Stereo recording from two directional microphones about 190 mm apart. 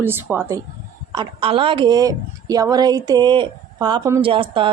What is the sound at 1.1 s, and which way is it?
Speech, 25° right (ahead or behind).